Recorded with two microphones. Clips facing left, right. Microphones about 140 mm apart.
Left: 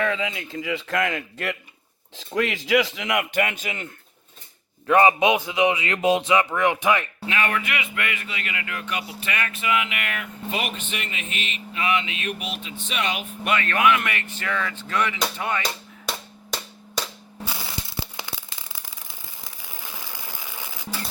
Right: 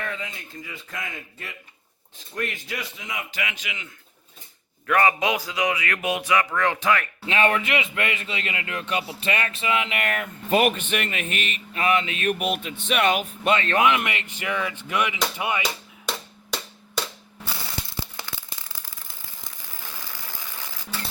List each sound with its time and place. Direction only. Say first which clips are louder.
0.0 s a man's voice: left 8 dB; 90° left; by 3.9 s 45° left (ahead or behind)
4.9 s speech: left 4 dB; 20° left (ahead or behind)
7.3 s a man's voice: right 4 dB; 25° right (ahead or behind); by 13.2 s 55° right (ahead or behind)
13.4 s speech: even; 25° right (ahead or behind)
18.0 s a sound: left 2 dB; 15° left (ahead or behind)